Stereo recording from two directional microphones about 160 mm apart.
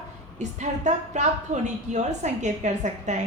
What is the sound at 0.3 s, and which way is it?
A woman's voice, 45° right (ahead or behind).